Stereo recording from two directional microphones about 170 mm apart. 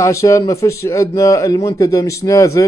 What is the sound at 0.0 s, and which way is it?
A man's voice, 20° left (ahead or behind).